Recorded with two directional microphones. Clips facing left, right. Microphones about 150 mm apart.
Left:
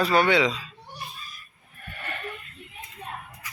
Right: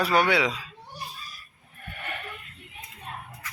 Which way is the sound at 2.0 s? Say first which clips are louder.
Even; 10° right (ahead or behind).